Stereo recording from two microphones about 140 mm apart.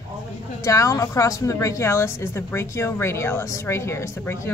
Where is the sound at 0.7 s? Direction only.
25° left (ahead or behind).